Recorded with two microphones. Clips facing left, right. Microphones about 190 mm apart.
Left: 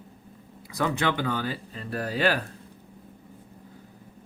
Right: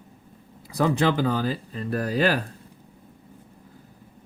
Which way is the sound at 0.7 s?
35° right (ahead or behind).